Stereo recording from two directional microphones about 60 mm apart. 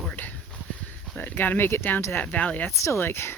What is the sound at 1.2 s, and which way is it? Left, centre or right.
Speech, left.